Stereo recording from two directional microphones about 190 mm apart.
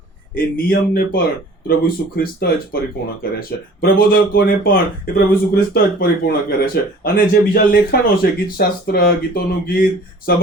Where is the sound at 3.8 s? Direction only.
50° left (ahead or behind).